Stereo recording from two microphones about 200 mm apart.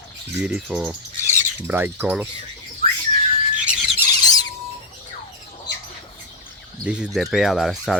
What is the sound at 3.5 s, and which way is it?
Squeal, 5° right (ahead or behind).